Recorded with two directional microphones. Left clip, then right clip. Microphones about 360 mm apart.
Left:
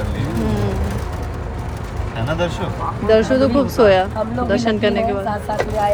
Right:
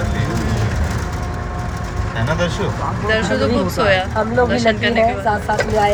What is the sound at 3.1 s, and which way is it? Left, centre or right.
Speech, centre.